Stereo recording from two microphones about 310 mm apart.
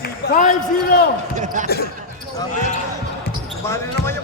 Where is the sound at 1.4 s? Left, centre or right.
Right.